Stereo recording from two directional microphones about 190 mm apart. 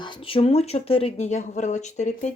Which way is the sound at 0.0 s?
30° left (ahead or behind).